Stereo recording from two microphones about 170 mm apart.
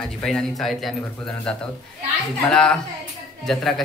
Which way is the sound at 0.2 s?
5° left (ahead or behind).